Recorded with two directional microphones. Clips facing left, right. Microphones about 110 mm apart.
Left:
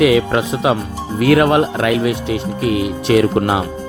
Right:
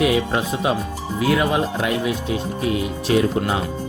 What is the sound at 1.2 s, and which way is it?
Speech, 65° left (ahead or behind).